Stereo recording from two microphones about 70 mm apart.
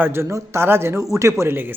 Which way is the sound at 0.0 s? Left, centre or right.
Right.